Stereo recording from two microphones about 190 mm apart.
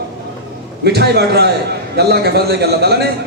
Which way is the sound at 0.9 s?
60° right (ahead or behind).